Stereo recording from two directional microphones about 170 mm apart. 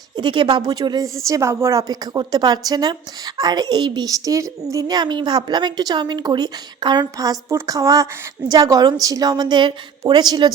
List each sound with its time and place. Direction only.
0.2 s a woman's voice: 25° right (ahead or behind)